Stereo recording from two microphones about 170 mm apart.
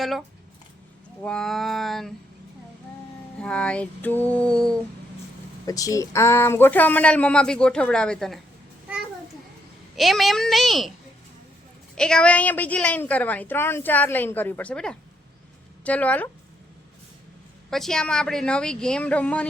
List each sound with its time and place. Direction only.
0.0 s a woman's voice: centre (ahead or behind)
3.3 s a woman's voice: 5° left (ahead or behind)
5.6 s a woman's voice: 20° left (ahead or behind); by 8.4 s 5° left (ahead or behind)
9.9 s a woman's voice: centre (ahead or behind)
11.9 s a woman's voice: 5° left (ahead or behind)
17.7 s a woman's voice: centre (ahead or behind)